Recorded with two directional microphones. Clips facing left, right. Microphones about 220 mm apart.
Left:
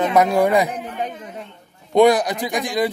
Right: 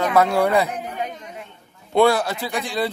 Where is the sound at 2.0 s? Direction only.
15° left (ahead or behind).